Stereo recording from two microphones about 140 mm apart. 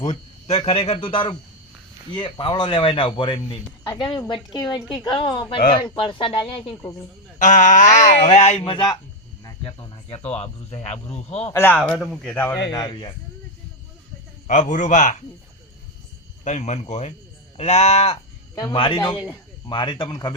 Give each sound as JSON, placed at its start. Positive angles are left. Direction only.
{"t": 0.0, "sound": "a man's voice", "side_deg": 45}
{"t": 7.3, "sound": "speech", "side_deg": 65}
{"t": 8.6, "sound": "a man's voice", "side_deg": 35}
{"t": 11.5, "sound": "speech", "side_deg": 15}
{"t": 11.8, "sound": "speech", "side_deg": 5}
{"t": 12.7, "sound": "a man's voice", "side_deg": 30}
{"t": 14.4, "sound": "speech", "side_deg": 65}
{"t": 16.4, "sound": "speech", "side_deg": 55}
{"t": 18.7, "sound": "a man's voice", "side_deg": 35}